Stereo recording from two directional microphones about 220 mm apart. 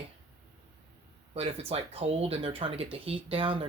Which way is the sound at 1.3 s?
25° right (ahead or behind).